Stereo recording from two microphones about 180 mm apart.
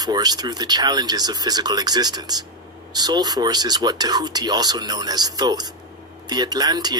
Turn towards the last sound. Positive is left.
turn(degrees=-20)  # may be behind; listen again after turning